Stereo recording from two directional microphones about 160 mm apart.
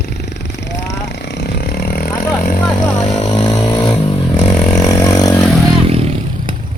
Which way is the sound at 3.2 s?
35° left (ahead or behind).